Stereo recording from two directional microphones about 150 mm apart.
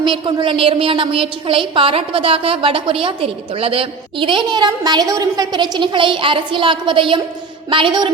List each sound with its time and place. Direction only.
0.0 s a woman's voice: 35° right (ahead or behind)